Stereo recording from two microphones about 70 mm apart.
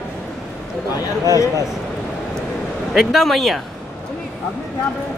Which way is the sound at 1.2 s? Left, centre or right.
Left.